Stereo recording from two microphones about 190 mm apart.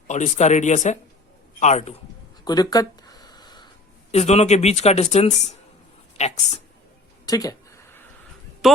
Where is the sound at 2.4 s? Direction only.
20° left (ahead or behind).